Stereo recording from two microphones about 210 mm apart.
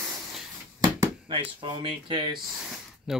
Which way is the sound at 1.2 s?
20° right (ahead or behind).